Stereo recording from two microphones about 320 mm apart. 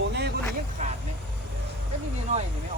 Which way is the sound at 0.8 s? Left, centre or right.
Right.